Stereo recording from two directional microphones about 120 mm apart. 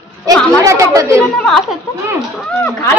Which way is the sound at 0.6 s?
25° right (ahead or behind).